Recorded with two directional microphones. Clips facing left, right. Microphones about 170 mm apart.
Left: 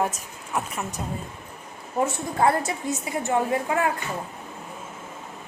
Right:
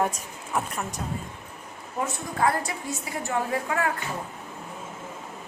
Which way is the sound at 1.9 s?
25° left (ahead or behind).